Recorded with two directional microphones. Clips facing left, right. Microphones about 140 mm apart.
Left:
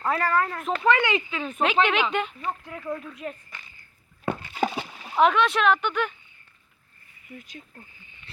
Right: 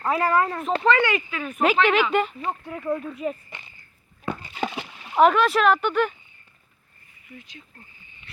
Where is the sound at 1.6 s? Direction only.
Centre (ahead or behind).